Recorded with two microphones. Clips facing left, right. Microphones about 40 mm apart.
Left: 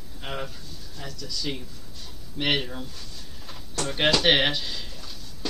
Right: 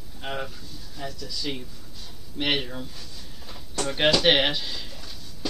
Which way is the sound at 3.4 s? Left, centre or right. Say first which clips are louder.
Even; centre.